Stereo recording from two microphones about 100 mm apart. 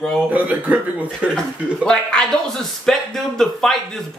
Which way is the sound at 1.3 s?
10° left (ahead or behind).